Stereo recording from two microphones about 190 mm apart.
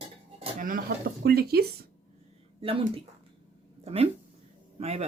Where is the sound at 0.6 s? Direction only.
50° right (ahead or behind).